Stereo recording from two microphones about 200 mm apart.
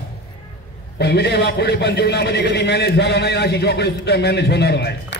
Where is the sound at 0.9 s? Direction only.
55° left (ahead or behind).